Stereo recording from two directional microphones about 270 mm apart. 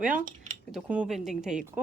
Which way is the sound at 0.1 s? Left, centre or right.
Right.